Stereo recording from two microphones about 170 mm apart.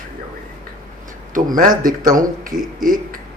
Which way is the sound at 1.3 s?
50° right (ahead or behind).